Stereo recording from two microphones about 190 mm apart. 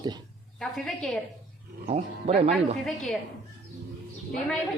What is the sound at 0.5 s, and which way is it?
Speech, centre (ahead or behind).